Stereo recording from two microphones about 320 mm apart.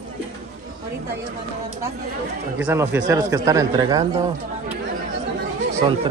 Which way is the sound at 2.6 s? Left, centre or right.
Centre.